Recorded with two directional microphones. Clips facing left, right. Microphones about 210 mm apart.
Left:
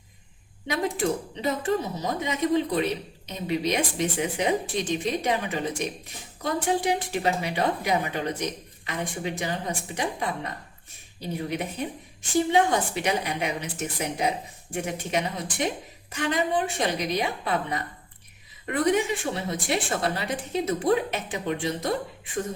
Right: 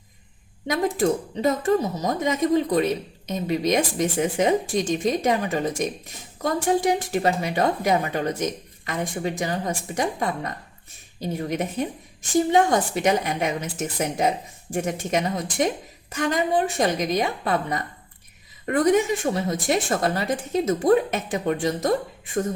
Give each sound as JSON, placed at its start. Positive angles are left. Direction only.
{"t": 0.7, "sound": "speech", "side_deg": -45}